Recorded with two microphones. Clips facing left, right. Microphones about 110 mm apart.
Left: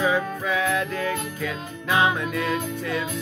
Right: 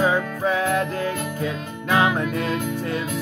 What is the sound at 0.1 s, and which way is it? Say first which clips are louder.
Music: right 2 dB; 30° right (ahead or behind).